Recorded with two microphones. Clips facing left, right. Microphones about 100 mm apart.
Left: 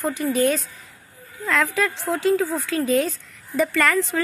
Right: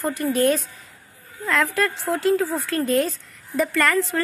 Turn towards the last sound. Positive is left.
turn(degrees=0)  # may be behind; listen again after turning